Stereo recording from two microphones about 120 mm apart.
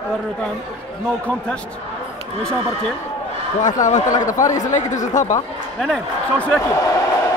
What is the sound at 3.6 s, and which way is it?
Speech, 90° left.